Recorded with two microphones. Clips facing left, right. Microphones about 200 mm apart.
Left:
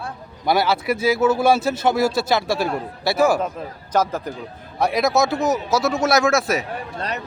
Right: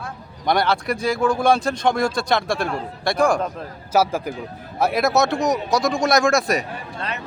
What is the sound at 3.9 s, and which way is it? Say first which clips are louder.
Speech: right 2 dB; 10° right (ahead or behind).